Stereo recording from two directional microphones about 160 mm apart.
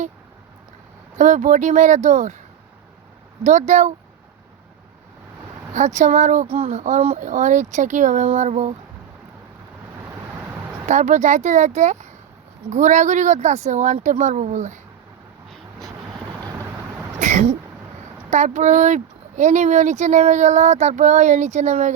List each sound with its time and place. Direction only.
1.2 s speech: 50° right (ahead or behind)
3.4 s speech: 45° right (ahead or behind)
5.7 s speech: 50° right (ahead or behind)
10.8 s speech: 50° right (ahead or behind)
17.2 s a sound: 50° right (ahead or behind)
18.3 s speech: 50° right (ahead or behind)